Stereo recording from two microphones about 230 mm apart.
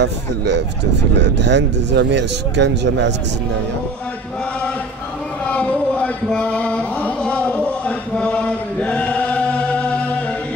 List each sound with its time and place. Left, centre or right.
0.0 s speech: right
5.5 s chant: centre